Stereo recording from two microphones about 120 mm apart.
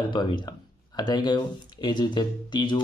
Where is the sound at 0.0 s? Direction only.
40° left (ahead or behind).